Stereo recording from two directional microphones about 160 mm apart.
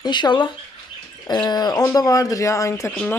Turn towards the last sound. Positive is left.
turn(degrees=10)  # may be behind; listen again after turning